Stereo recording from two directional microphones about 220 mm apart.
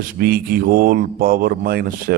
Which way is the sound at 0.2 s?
40° right (ahead or behind).